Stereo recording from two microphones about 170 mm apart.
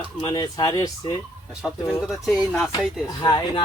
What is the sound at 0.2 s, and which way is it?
Speech, 25° left (ahead or behind).